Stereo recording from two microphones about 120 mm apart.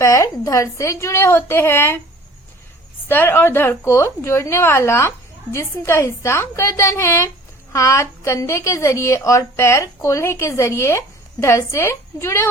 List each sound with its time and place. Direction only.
0.0 s a woman's voice: 25° left (ahead or behind)
3.1 s a woman's voice: 15° left (ahead or behind)